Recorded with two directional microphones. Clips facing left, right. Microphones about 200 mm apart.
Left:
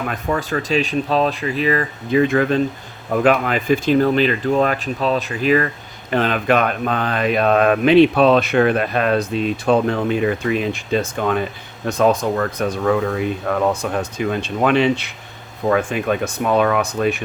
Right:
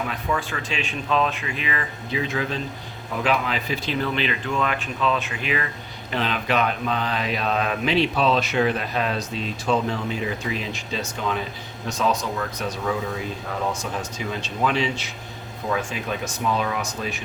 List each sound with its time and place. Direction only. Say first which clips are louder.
0.1 s speech: left 6 dB; 40° left (ahead or behind)
6.1 s speech: left 7 dB; 50° left (ahead or behind)